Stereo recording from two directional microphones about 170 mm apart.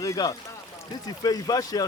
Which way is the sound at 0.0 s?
20° left (ahead or behind).